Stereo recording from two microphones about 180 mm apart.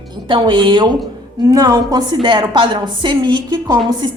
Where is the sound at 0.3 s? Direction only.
25° right (ahead or behind).